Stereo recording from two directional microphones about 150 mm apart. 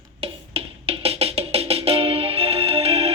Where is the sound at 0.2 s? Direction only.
40° right (ahead or behind).